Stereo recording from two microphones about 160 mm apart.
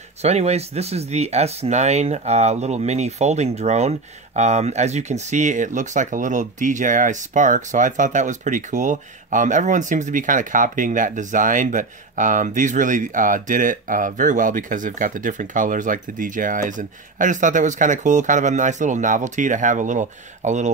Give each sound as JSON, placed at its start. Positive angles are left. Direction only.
{"t": 0.2, "sound": "speech", "side_deg": -40}